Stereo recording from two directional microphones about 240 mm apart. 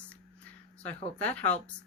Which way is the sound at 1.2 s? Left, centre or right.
Centre.